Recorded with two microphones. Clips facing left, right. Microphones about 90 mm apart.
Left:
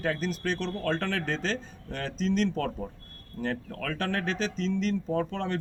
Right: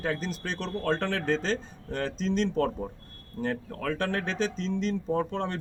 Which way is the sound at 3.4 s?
35° right (ahead or behind).